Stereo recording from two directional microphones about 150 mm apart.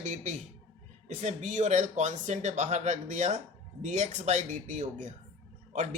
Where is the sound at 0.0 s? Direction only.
55° right (ahead or behind).